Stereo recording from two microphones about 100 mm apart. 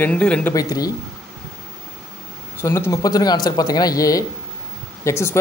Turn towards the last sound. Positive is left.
turn(degrees=25)  # may be behind; listen again after turning